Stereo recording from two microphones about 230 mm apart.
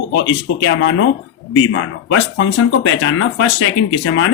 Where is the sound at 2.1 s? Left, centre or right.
Left.